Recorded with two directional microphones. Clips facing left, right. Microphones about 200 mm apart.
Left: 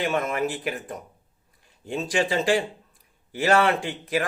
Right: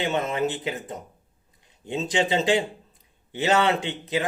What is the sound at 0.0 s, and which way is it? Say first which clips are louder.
Speech: even; 25° right (ahead or behind).